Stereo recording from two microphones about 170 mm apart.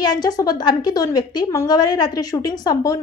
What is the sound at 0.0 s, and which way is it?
A woman's voice, 25° left (ahead or behind).